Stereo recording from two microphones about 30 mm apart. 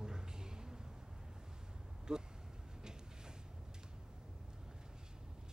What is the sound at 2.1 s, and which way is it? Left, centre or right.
Vehicle, right.